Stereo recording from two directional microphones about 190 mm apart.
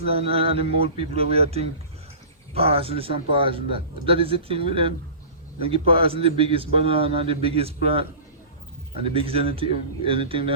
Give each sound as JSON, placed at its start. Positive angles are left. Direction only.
{"t": 0.0, "sound": "speech", "side_deg": -30}
{"t": 9.0, "sound": "speech", "side_deg": -30}